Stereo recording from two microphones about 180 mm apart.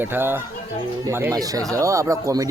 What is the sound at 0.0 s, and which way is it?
Speech, 10° right (ahead or behind).